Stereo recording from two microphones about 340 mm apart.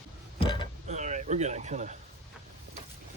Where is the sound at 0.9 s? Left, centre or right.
Right.